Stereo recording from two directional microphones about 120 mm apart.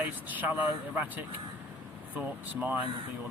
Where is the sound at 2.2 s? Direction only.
15° right (ahead or behind).